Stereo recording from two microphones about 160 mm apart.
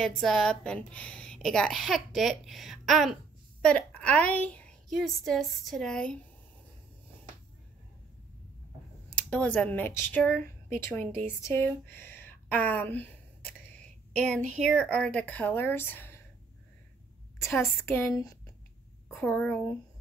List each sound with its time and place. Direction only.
0.0 s a woman's voice: centre (ahead or behind)
9.1 s speech: 5° left (ahead or behind)
14.6 s a woman's voice: 5° left (ahead or behind)
17.4 s a woman's voice: 15° left (ahead or behind)
19.1 s a woman's voice: 10° left (ahead or behind)